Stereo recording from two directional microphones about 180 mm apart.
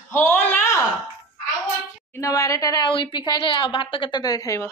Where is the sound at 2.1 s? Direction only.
15° left (ahead or behind).